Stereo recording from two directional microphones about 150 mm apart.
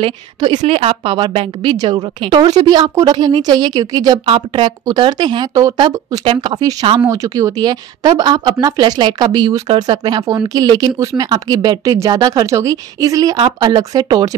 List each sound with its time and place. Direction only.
0.0 s a woman's voice: 30° right (ahead or behind)
0.6 s a woman's voice: 40° right (ahead or behind); by 14.3 s 25° right (ahead or behind)